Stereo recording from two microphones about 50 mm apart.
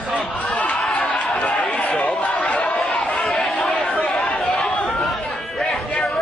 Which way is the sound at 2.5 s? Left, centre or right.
Left.